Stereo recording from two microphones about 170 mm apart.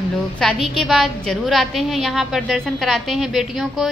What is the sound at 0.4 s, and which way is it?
A woman's voice, centre (ahead or behind).